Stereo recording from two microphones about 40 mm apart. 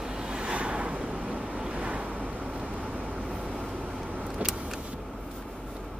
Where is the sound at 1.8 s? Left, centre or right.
Right.